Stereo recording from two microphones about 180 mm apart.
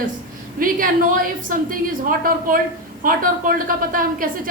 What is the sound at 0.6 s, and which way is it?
A woman's voice, 50° right (ahead or behind).